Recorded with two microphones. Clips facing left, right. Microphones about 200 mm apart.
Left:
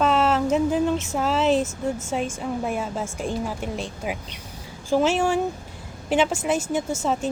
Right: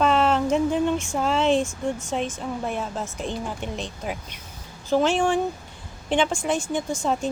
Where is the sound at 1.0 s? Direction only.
5° left (ahead or behind).